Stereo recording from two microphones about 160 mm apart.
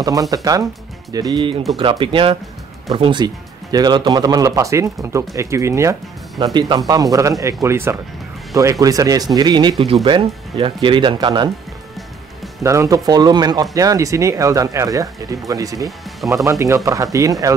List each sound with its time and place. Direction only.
0.0 s speech: 20° right (ahead or behind)
12.6 s speech: 20° right (ahead or behind)